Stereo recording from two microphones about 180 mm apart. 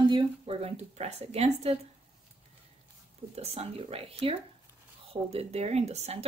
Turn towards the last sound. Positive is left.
turn(degrees=-35)  # may be behind; listen again after turning